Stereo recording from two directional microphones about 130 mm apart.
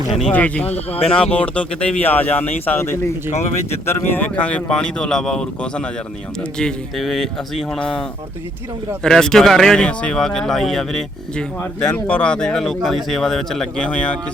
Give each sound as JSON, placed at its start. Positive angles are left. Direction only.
{"t": 0.3, "sound": "speech", "side_deg": 10}
{"t": 0.7, "sound": "speech", "side_deg": 50}
{"t": 1.1, "sound": "speech", "side_deg": 10}
{"t": 9.0, "sound": "speech", "side_deg": 5}